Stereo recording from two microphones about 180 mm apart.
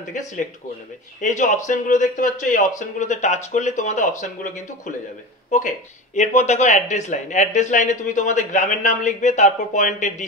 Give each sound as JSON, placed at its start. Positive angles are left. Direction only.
{"t": 0.2, "sound": "speech", "side_deg": 45}
{"t": 5.5, "sound": "speech", "side_deg": 45}